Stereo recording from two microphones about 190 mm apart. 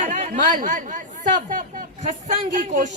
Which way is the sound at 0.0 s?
40° right (ahead or behind).